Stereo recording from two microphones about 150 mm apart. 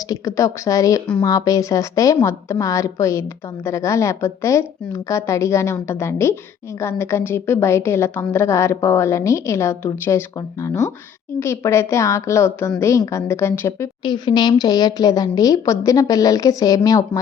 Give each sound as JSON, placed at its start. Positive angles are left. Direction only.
{"t": 0.1, "sound": "a woman's voice", "side_deg": 20}
{"t": 14.0, "sound": "a woman's voice", "side_deg": 30}